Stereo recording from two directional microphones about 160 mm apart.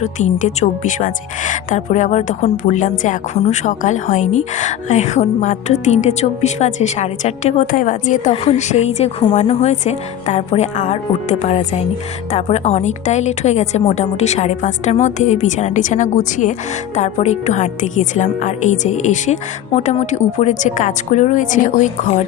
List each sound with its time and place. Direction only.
0.0 s a woman's voice: 45° left (ahead or behind)
3.3 s a woman's voice: 40° left (ahead or behind)